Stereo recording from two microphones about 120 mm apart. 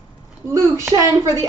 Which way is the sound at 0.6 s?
25° right (ahead or behind).